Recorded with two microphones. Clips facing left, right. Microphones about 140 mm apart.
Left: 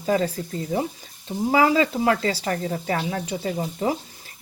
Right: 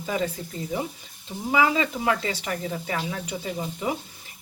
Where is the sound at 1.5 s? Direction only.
35° left (ahead or behind).